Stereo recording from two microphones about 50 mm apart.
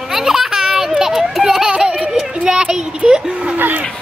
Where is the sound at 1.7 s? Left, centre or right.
Right.